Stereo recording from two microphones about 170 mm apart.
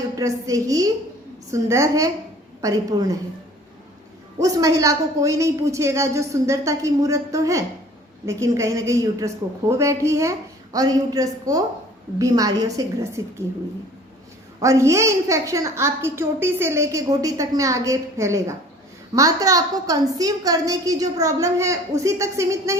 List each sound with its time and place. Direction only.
0.2 s a woman's voice: 20° right (ahead or behind)
4.4 s a woman's voice: 20° right (ahead or behind)
14.6 s a child's voice: 20° right (ahead or behind)